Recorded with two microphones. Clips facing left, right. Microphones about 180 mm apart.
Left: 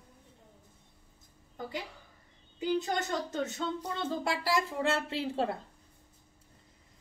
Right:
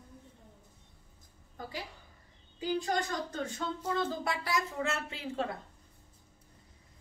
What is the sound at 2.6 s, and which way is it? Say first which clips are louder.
A woman's voice: left 1 dB; 25° left (ahead or behind).